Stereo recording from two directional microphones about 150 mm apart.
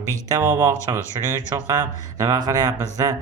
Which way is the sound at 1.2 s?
25° right (ahead or behind).